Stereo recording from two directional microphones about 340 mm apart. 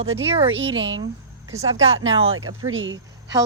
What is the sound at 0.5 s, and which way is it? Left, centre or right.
Speech, right.